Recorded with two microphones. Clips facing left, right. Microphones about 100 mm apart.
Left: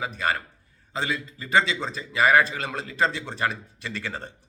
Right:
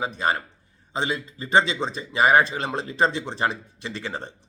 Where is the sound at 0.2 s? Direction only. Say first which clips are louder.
Even; 25° right (ahead or behind).